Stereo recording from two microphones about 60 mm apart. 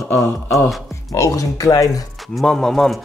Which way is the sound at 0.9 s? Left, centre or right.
Left.